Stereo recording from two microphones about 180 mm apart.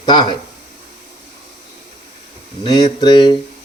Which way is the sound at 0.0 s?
25° left (ahead or behind).